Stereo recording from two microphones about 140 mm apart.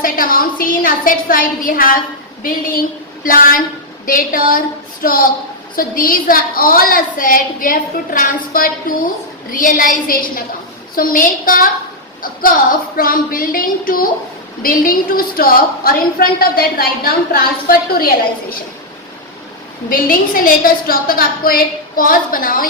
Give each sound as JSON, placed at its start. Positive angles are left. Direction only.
{"t": 0.0, "sound": "a woman's voice", "side_deg": 90}
{"t": 19.9, "sound": "a woman's voice", "side_deg": 80}